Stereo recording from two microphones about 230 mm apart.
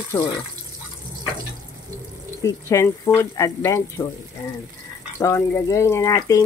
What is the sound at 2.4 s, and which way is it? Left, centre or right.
Speech, centre.